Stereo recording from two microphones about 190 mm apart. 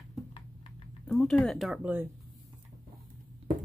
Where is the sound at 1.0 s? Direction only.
Centre (ahead or behind).